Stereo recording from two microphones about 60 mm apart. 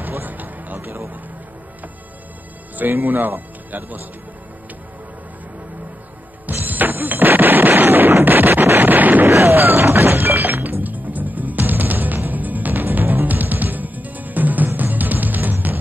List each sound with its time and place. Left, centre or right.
0.0 s music: right
0.7 s a sound: right
2.7 s speech: right
6.4 s music: right
8.6 s wind noise: right
9.3 s music: right